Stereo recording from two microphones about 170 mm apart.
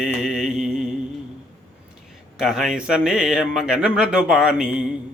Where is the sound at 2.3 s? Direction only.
Centre (ahead or behind).